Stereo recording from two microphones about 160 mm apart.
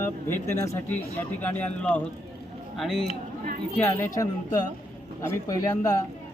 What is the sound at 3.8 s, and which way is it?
Speech, 15° left (ahead or behind).